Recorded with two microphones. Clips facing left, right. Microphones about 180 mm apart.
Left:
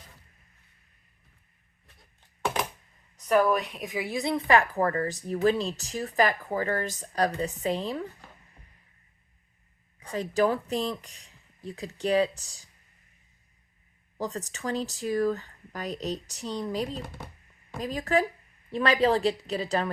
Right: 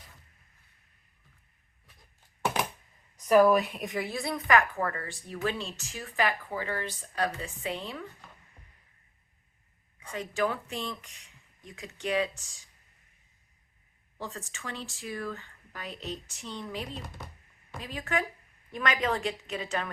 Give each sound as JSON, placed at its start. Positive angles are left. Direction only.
{"t": 2.4, "sound": "a sound", "side_deg": -10}
{"t": 3.2, "sound": "speech", "side_deg": -5}
{"t": 4.1, "sound": "speech", "side_deg": 20}
{"t": 10.0, "sound": "speech", "side_deg": 35}
{"t": 14.2, "sound": "speech", "side_deg": 40}